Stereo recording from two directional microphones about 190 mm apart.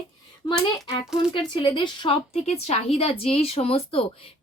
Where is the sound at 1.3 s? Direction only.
25° left (ahead or behind).